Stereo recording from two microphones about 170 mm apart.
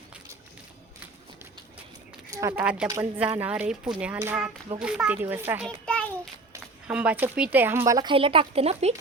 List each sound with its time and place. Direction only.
2.3 s speech: 15° right (ahead or behind)
5.6 s a sound: 5° left (ahead or behind)
6.8 s speech: 5° right (ahead or behind); by 9.0 s 40° right (ahead or behind)